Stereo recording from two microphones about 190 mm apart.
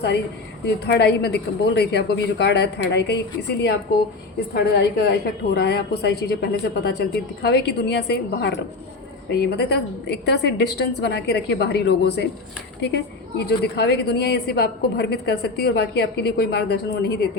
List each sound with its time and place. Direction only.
0.9 s a woman's voice: 60° left (ahead or behind)